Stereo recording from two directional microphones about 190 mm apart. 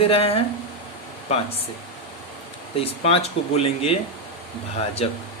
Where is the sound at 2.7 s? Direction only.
30° left (ahead or behind).